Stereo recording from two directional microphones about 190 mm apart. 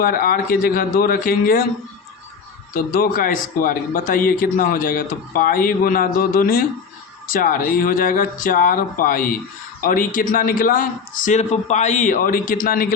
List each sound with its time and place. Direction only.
0.0 s speech: 50° left (ahead or behind)
2.7 s speech: 50° left (ahead or behind)